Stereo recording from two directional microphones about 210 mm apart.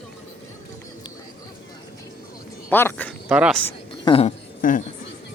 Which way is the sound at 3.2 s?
5° right (ahead or behind).